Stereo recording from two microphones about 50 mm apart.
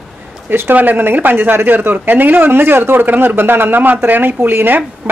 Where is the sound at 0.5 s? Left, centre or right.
Right.